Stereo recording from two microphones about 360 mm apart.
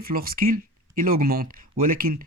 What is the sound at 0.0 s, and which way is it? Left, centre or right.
Speech, right.